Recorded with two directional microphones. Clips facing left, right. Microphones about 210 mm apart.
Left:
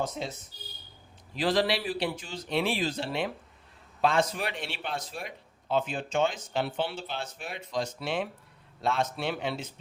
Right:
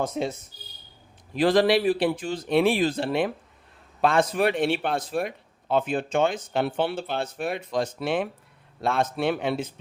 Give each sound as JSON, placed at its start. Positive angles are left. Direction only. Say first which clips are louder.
{"t": 0.0, "sound": "a man's voice", "louder": "right 6 dB", "side_deg": -50}
{"t": 1.4, "sound": "a man's voice", "louder": "right 7 dB", "side_deg": -55}